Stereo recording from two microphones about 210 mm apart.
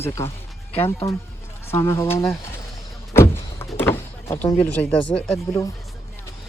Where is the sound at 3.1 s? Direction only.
10° left (ahead or behind).